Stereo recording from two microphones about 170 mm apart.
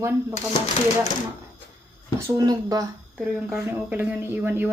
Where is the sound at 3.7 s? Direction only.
10° right (ahead or behind).